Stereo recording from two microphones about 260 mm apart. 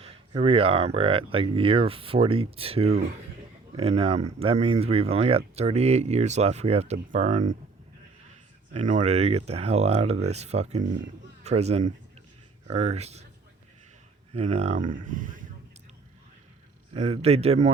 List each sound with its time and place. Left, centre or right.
0.0 s speech: right
8.7 s speech: right
14.3 s speech: right
16.9 s speech: right